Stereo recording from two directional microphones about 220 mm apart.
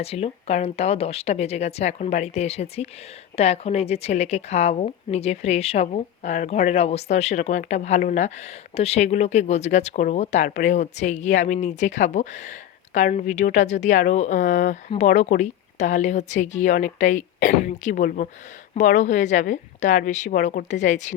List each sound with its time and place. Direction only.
0.0 s a woman's voice: 25° left (ahead or behind)